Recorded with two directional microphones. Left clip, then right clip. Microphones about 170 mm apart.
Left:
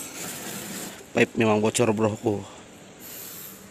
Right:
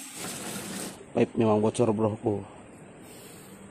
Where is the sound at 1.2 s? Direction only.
5° right (ahead or behind).